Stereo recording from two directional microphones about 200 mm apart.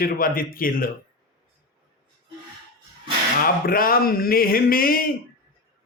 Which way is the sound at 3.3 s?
45° left (ahead or behind).